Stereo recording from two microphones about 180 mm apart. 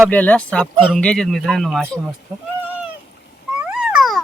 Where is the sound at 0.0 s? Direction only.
10° left (ahead or behind).